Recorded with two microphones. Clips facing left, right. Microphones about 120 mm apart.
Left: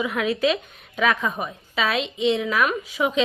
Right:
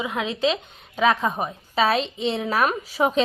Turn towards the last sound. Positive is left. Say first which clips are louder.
# right 1 dB
turn(degrees=-35)  # may be behind; listen again after turning